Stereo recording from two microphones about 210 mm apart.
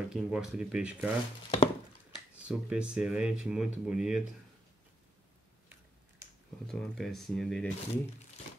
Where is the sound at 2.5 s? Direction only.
5° right (ahead or behind).